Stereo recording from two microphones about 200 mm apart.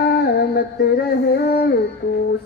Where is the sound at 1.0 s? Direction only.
50° left (ahead or behind).